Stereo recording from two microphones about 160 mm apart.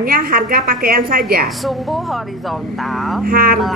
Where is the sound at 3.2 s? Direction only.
65° right (ahead or behind).